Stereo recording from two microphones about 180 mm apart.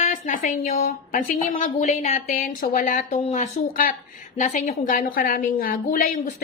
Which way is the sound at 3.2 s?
35° left (ahead or behind).